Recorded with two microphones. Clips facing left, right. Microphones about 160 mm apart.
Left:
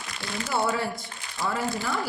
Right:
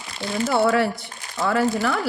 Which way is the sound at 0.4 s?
65° right (ahead or behind).